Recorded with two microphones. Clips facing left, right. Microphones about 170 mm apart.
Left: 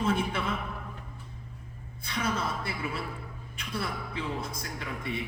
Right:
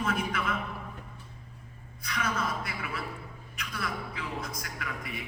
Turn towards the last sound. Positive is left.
turn(degrees=30)  # may be behind; listen again after turning